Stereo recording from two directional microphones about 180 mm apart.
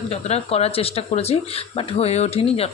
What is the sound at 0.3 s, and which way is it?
Speech, 35° left (ahead or behind).